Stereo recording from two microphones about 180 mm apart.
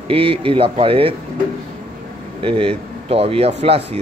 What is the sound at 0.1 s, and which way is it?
Speech, 30° right (ahead or behind).